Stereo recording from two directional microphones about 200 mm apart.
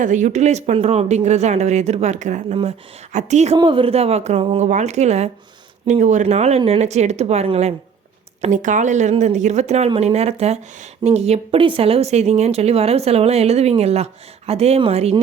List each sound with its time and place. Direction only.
0.0 s speech: 40° right (ahead or behind)